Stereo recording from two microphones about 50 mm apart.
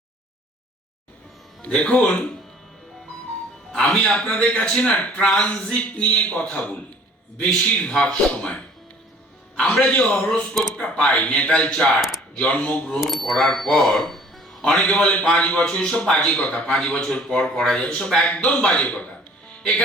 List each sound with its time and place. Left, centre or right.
1.6 s a man's voice: left
3.7 s a man's voice: centre
11.9 s speech: centre
12.4 s a man's voice: left
13.0 s speech: centre
13.3 s speech: centre
14.6 s a man's voice: centre